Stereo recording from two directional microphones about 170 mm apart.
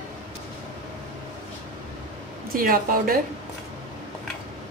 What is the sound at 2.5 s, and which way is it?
Speech, 55° right (ahead or behind).